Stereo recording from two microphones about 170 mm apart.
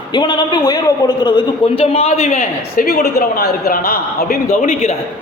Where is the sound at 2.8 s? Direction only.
65° left (ahead or behind).